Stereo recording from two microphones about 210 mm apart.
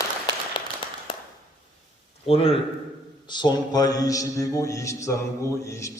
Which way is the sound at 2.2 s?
25° left (ahead or behind).